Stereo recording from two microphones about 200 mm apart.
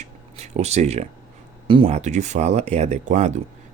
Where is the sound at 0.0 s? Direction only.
35° right (ahead or behind).